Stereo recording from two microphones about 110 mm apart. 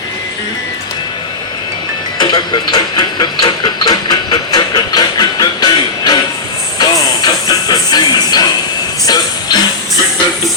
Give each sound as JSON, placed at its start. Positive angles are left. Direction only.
{"t": 2.1, "sound": "train", "side_deg": 40}
{"t": 6.7, "sound": "music", "side_deg": 40}